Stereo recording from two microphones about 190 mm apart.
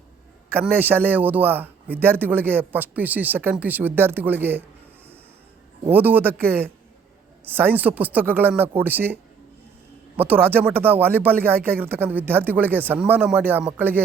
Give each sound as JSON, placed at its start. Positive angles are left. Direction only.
{"t": 0.5, "sound": "a man's voice", "side_deg": -10}
{"t": 5.9, "sound": "a man's voice", "side_deg": -10}
{"t": 10.2, "sound": "a man's voice", "side_deg": -10}